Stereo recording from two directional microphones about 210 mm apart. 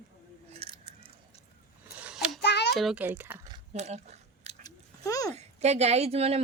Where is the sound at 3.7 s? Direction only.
30° right (ahead or behind).